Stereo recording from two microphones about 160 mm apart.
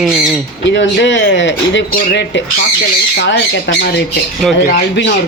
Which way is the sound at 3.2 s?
90° left.